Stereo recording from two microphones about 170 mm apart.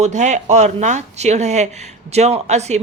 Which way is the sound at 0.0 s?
45° right (ahead or behind).